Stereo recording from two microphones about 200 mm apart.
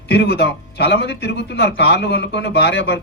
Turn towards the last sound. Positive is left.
turn(degrees=60)  # may be behind; listen again after turning